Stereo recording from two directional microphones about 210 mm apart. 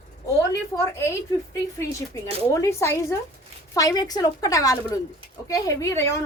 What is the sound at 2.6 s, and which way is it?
Speech, 15° left (ahead or behind).